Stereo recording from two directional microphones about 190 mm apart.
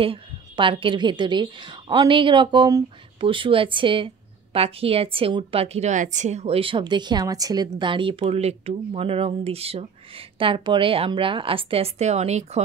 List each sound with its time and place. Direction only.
0.0 s a woman's voice: 30° right (ahead or behind)